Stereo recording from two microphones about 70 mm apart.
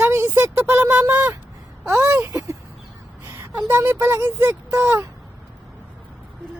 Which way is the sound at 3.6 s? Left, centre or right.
Right.